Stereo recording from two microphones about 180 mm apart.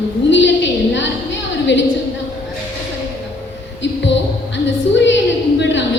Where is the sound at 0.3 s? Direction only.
90° left.